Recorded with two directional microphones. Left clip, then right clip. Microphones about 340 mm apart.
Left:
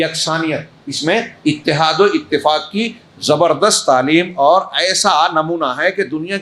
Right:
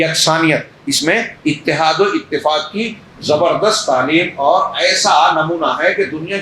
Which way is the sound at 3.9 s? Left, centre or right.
Left.